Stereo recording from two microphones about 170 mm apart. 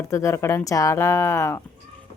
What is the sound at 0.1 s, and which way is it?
A woman's voice, 15° left (ahead or behind).